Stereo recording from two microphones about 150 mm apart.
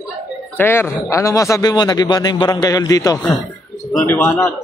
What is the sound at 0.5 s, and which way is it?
A man's voice, 15° left (ahead or behind).